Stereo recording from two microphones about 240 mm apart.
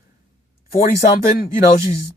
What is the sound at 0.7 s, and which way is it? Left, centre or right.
Speech, left.